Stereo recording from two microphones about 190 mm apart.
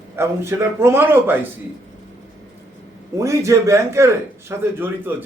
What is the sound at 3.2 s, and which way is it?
A man's voice, 15° right (ahead or behind).